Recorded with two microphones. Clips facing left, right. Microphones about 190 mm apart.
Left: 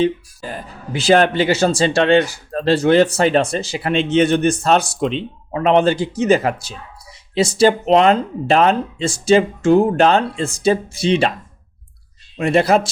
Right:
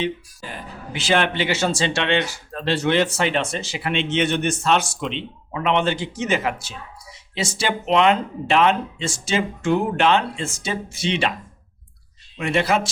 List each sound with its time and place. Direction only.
0.0 s speech: 40° left (ahead or behind)
12.4 s speech: 35° left (ahead or behind)